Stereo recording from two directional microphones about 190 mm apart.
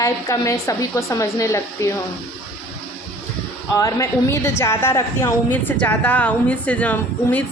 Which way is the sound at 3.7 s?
15° left (ahead or behind).